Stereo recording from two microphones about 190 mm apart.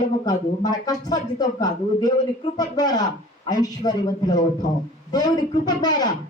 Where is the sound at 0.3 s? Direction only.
20° left (ahead or behind).